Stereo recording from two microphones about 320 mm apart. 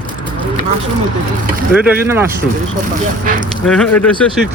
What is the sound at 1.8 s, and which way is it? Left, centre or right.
Speech, centre.